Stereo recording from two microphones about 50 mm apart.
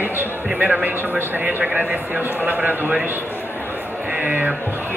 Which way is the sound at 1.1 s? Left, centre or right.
Right.